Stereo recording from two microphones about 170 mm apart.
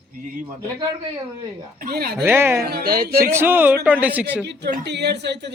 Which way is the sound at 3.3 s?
15° right (ahead or behind).